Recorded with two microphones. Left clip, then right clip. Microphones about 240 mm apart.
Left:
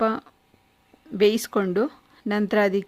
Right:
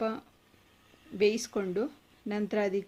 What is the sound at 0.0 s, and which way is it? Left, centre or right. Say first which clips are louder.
Speech: left 10 dB; left.